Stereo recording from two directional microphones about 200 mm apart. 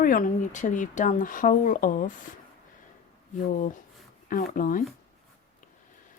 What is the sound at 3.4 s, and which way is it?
Speech, 40° left (ahead or behind).